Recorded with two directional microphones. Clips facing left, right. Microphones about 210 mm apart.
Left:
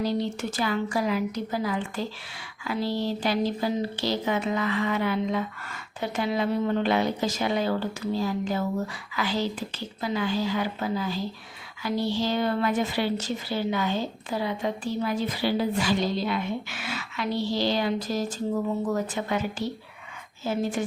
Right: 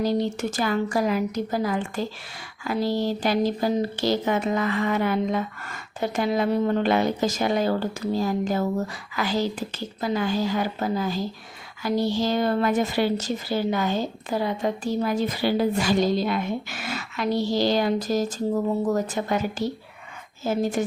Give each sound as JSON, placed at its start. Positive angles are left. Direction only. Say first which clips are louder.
{"t": 0.0, "sound": "a woman's voice", "louder": "right 3 dB", "side_deg": -45}